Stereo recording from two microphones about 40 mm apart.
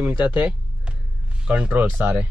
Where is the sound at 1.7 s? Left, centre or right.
Right.